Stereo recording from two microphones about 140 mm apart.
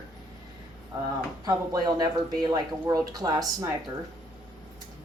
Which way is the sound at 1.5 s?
30° right (ahead or behind).